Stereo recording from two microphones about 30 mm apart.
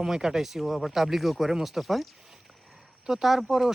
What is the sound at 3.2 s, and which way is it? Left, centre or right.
Speech, centre.